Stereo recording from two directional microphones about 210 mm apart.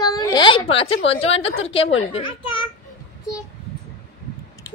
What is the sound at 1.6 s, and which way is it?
Speech, 30° left (ahead or behind).